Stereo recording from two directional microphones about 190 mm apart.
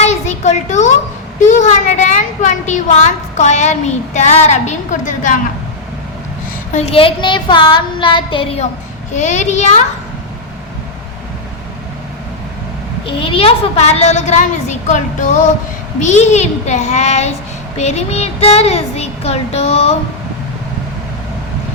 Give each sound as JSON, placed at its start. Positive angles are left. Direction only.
{"t": 0.0, "sound": "a sound", "side_deg": 35}
{"t": 1.4, "sound": "a woman's voice", "side_deg": 40}
{"t": 6.7, "sound": "a woman's voice", "side_deg": 30}
{"t": 13.1, "sound": "a woman's voice", "side_deg": 30}